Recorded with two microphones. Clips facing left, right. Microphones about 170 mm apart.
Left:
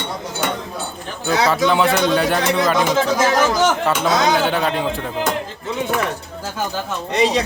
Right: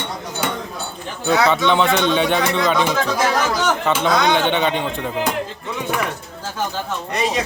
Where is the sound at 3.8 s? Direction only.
5° left (ahead or behind).